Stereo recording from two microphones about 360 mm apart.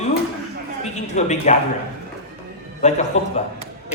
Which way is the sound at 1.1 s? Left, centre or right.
Centre.